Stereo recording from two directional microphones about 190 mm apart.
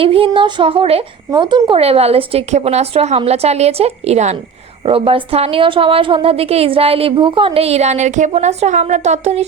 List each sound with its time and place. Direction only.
0.0 s a woman's voice: 30° right (ahead or behind)